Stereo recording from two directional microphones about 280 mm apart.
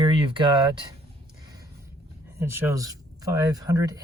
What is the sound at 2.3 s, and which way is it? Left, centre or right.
Speech, centre.